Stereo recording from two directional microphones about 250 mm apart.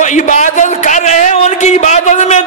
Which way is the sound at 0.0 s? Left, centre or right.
Left.